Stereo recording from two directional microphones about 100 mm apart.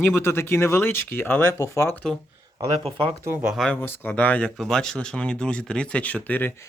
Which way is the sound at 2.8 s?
75° right (ahead or behind).